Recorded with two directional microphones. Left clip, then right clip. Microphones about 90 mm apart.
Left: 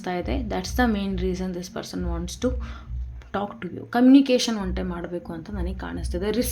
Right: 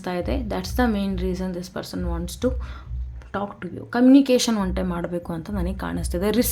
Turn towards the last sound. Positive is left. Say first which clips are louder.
# right 3 dB
turn(degrees=-65)  # may be behind; listen again after turning